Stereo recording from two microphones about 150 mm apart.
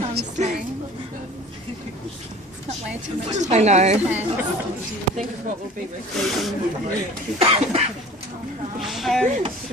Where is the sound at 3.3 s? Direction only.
50° right (ahead or behind).